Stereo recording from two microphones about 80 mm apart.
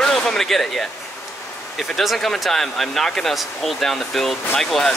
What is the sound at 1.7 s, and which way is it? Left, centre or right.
Speech, centre.